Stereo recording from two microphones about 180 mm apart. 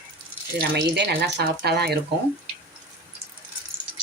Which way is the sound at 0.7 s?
70° right (ahead or behind).